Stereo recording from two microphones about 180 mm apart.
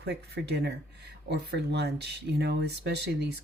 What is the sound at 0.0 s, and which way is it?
Speech, 65° right (ahead or behind).